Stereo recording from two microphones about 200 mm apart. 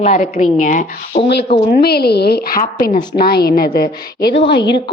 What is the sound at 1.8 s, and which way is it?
A woman's voice, 50° left (ahead or behind).